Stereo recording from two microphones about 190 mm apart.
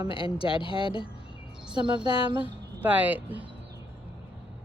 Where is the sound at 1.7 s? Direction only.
25° right (ahead or behind).